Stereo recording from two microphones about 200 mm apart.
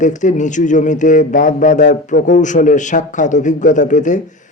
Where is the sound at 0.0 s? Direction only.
40° left (ahead or behind).